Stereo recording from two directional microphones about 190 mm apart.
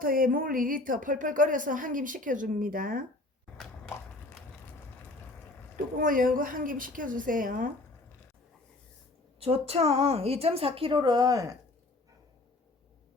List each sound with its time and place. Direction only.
0.0 s speech: 50° right (ahead or behind)
5.7 s speech: 45° right (ahead or behind)
9.4 s a woman's voice: 30° right (ahead or behind)